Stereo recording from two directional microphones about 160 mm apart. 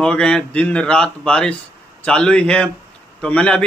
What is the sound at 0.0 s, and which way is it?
A man's voice, 5° left (ahead or behind).